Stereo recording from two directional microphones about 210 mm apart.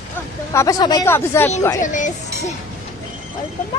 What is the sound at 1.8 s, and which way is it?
Speech, 35° left (ahead or behind).